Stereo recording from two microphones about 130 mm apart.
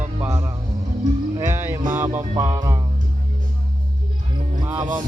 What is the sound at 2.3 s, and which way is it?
Music, 35° right (ahead or behind).